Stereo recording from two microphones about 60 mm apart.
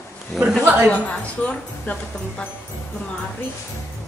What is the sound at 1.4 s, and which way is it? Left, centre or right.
Speech, left.